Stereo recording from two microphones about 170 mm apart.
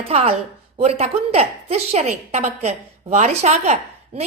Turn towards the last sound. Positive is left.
turn(degrees=-40)  # may be behind; listen again after turning